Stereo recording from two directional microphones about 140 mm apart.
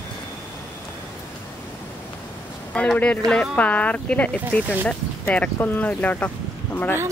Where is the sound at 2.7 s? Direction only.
10° left (ahead or behind).